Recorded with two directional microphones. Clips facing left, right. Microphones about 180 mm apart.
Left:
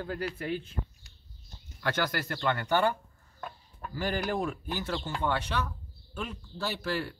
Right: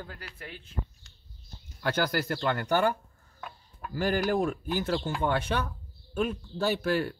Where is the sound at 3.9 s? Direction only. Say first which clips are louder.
Right 4 dB; 45° right (ahead or behind).